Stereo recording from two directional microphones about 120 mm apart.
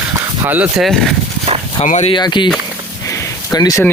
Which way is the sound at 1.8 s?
80° left.